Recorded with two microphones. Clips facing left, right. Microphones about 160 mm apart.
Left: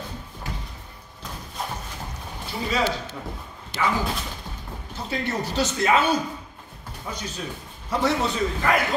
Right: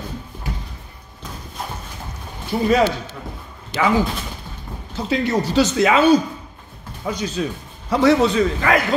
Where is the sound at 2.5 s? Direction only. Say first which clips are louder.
Right 11 dB; 50° right (ahead or behind).